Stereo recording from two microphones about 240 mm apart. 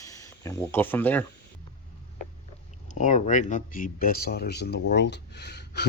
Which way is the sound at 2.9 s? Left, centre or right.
Left.